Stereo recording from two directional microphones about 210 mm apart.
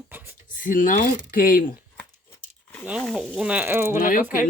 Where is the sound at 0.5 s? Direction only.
40° left (ahead or behind).